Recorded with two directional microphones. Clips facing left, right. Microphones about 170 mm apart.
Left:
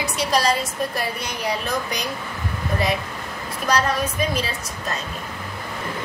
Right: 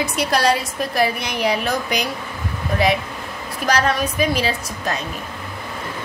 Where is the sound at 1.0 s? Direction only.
75° right (ahead or behind).